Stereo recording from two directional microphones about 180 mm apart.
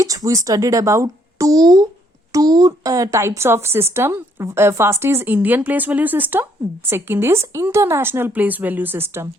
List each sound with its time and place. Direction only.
0.0 s speech: 20° right (ahead or behind)